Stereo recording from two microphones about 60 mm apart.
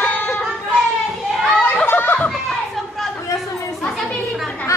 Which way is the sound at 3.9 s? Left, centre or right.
Centre.